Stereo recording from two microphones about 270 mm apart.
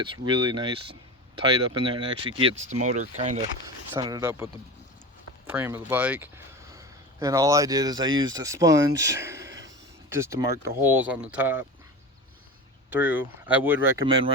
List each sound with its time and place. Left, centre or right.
0.0 s speech: centre
3.9 s speech: centre
5.5 s speech: centre
12.9 s speech: centre